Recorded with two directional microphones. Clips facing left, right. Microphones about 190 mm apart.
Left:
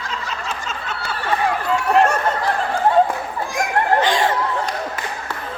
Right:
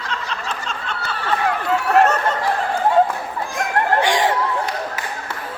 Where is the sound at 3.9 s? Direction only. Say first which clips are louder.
Right 2 dB; 15° right (ahead or behind).